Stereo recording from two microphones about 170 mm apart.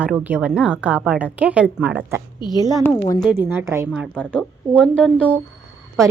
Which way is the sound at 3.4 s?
10° right (ahead or behind).